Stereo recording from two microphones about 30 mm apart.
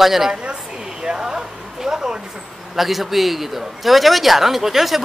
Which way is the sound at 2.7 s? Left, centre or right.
Centre.